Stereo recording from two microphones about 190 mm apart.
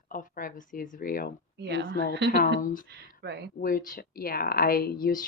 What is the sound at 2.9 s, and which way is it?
Speech, 60° right (ahead or behind).